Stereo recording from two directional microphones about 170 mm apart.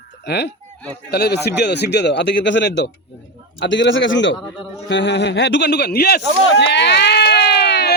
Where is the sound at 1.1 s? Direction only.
75° left (ahead or behind); by 4.4 s 90° left.